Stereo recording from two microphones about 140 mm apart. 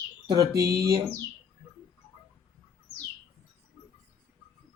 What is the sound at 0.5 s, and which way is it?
Speech, 25° right (ahead or behind).